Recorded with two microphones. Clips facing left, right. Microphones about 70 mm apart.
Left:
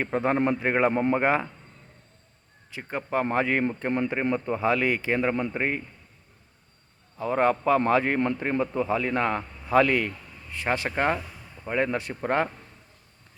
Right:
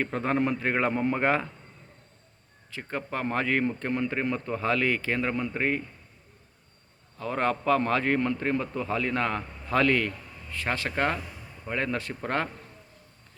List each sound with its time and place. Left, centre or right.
0.0 s a man's voice: centre
2.7 s a man's voice: centre
7.2 s a man's voice: centre